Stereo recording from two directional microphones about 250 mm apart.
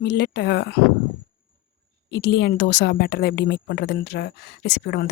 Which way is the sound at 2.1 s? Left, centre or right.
Left.